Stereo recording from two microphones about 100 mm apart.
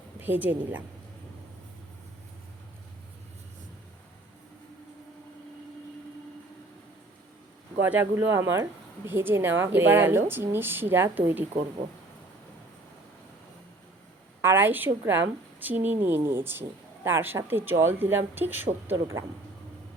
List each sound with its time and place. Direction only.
0.2 s a woman's voice: 20° right (ahead or behind)
7.8 s a woman's voice: 15° right (ahead or behind)
14.4 s a woman's voice: 20° right (ahead or behind)
18.9 s speech: 30° right (ahead or behind)